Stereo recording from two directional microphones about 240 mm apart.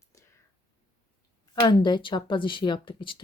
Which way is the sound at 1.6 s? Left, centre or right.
Centre.